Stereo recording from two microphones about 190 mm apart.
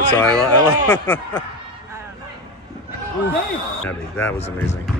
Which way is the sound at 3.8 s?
10° left (ahead or behind).